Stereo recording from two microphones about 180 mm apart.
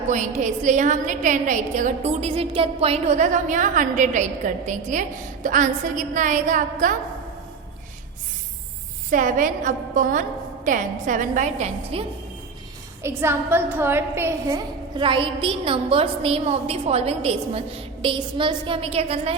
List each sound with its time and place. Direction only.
0.1 s a woman's voice: 40° right (ahead or behind)
9.0 s a woman's voice: 45° right (ahead or behind)
13.0 s a woman's voice: 15° right (ahead or behind); by 19.4 s 35° right (ahead or behind)